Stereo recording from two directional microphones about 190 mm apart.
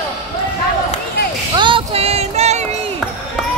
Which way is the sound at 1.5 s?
25° right (ahead or behind).